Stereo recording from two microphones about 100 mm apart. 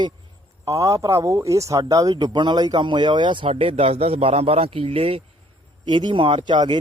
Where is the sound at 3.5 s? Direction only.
70° right (ahead or behind).